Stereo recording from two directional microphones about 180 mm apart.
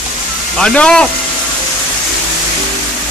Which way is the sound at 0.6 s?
5° left (ahead or behind).